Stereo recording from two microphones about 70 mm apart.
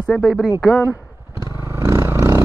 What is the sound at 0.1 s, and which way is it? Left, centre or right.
Speech, centre.